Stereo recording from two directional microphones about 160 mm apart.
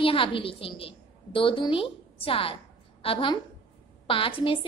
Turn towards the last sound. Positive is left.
turn(degrees=35)  # may be behind; listen again after turning